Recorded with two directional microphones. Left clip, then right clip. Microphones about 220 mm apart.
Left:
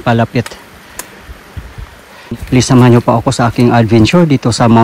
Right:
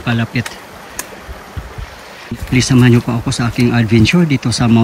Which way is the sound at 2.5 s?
15° left (ahead or behind).